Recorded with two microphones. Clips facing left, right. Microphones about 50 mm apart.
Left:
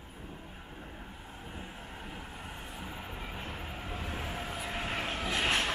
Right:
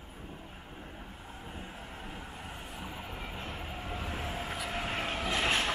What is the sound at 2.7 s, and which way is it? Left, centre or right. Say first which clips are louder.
Vehicle: right 1 dB; centre.